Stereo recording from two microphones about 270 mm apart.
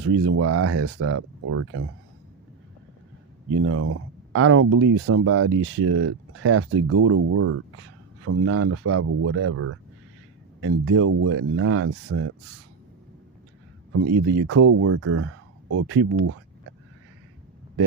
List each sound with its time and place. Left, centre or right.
0.0 s speech: right
3.5 s speech: right
13.9 s speech: right